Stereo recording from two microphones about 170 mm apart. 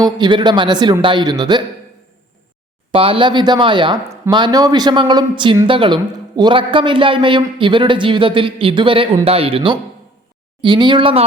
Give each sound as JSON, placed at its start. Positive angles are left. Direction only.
{"t": 0.0, "sound": "a man's voice", "side_deg": -25}
{"t": 2.9, "sound": "a man's voice", "side_deg": -30}